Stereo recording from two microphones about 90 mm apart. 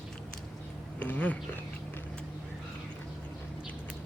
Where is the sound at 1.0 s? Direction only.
15° left (ahead or behind).